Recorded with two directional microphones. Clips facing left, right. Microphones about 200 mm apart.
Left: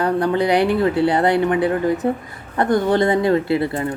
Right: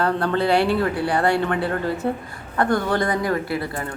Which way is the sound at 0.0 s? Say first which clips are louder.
Left 3 dB; 15° left (ahead or behind).